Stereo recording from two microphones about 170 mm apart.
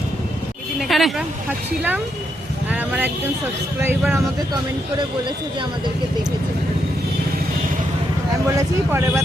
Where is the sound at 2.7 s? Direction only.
10° right (ahead or behind).